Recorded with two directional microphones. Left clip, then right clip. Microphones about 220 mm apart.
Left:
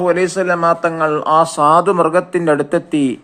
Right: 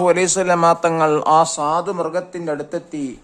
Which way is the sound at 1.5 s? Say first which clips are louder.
Left 8 dB; 5° left (ahead or behind).